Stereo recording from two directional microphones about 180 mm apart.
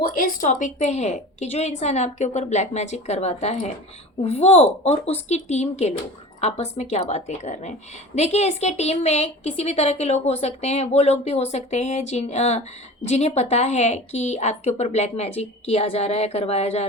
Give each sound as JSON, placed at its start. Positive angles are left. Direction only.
{"t": 0.0, "sound": "a woman's voice", "side_deg": 50}